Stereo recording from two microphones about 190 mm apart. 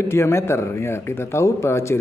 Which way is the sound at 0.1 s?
15° left (ahead or behind).